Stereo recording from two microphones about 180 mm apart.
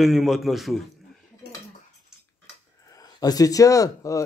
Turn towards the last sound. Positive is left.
turn(degrees=20)  # may be behind; listen again after turning